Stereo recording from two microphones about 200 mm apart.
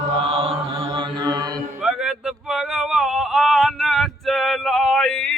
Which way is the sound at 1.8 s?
5° right (ahead or behind).